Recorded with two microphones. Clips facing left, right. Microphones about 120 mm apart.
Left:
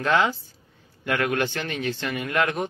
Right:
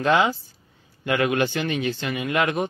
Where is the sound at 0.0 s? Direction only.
20° right (ahead or behind).